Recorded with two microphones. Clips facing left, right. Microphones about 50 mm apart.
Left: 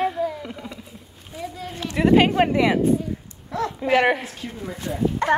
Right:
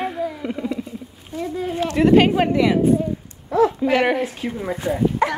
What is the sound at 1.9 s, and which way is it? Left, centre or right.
Speech, centre.